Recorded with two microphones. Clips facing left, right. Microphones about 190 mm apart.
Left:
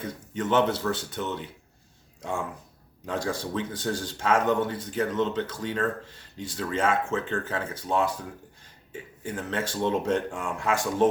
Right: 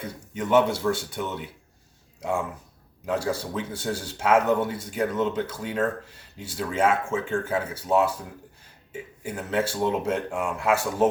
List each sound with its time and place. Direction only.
0.0 s a man's voice: 10° right (ahead or behind)
3.1 s a man's voice: 5° right (ahead or behind)